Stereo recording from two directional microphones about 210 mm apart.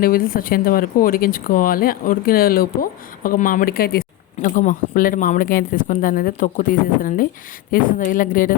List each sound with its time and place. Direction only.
0.0 s speech: 45° left (ahead or behind)